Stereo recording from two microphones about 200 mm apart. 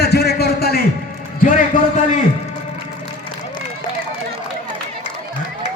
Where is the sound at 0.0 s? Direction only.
55° left (ahead or behind).